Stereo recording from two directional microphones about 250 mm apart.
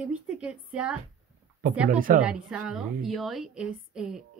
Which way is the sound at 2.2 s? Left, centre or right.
Centre.